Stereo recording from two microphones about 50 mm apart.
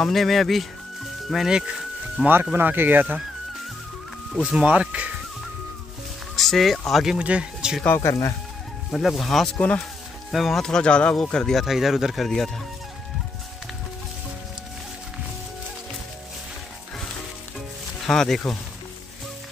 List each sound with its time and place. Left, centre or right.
0.0 s speech: centre
2.2 s speech: right
2.5 s speech: right
4.5 s speech: right
6.3 s speech: centre
7.2 s speech: right
8.0 s speech: left
8.9 s speech: centre
10.7 s speech: centre
11.6 s speech: centre
18.0 s speech: centre